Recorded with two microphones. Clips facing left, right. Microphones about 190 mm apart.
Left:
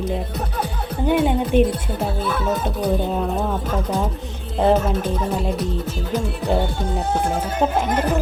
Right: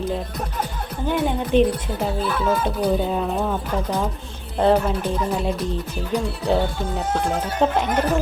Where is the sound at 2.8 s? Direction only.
Centre (ahead or behind).